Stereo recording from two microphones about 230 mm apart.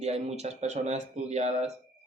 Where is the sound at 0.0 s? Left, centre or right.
Right.